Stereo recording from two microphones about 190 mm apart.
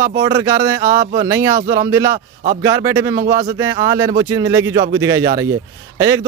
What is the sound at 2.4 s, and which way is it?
Speech, 50° right (ahead or behind).